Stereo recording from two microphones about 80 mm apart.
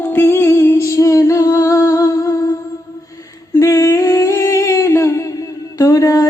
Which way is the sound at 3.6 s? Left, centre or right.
Left.